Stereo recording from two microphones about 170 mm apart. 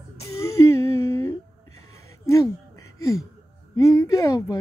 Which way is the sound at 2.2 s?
15° left (ahead or behind).